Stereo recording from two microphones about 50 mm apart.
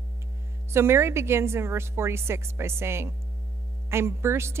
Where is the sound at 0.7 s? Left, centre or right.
Right.